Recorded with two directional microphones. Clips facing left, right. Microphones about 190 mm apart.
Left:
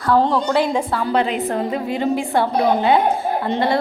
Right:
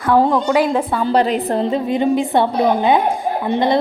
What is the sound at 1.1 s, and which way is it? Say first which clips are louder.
A woman's voice: right 4 dB; 40° right (ahead or behind).